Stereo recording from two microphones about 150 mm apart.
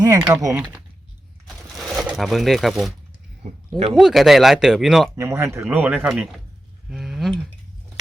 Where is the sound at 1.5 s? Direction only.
Centre (ahead or behind).